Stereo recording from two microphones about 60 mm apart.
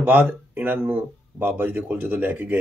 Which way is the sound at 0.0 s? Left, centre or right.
Right.